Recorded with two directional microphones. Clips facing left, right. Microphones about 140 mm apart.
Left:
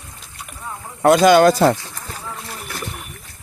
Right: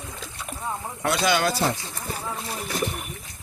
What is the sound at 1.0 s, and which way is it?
Speech, 45° left (ahead or behind).